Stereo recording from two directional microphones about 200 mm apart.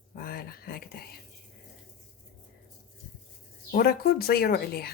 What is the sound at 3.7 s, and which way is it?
A woman's voice, 50° left (ahead or behind).